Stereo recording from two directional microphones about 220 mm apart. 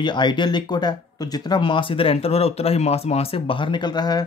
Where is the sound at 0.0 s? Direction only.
20° left (ahead or behind).